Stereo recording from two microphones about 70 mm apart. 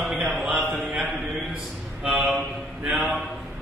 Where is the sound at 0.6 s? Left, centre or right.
Right.